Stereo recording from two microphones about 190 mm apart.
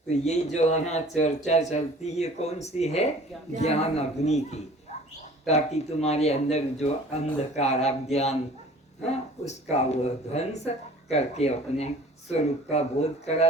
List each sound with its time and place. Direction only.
0.1 s speech: 35° left (ahead or behind)
9.5 s speech: 35° left (ahead or behind)